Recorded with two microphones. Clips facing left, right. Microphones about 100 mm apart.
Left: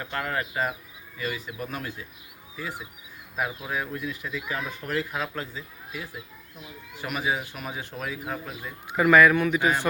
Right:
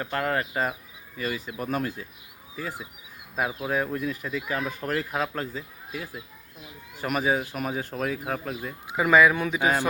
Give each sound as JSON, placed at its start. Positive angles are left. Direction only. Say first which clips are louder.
{"t": 0.0, "sound": "speech", "louder": "right 3 dB", "side_deg": -35}
{"t": 9.0, "sound": "speech", "louder": "left 1 dB", "side_deg": -15}